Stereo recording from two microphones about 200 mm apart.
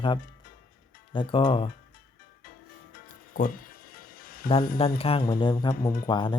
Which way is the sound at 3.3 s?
45° left (ahead or behind).